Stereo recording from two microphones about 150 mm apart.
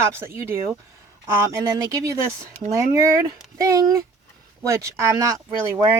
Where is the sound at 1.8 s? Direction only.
20° right (ahead or behind).